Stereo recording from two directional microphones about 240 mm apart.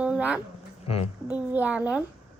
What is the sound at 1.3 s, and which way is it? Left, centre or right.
Speech, centre.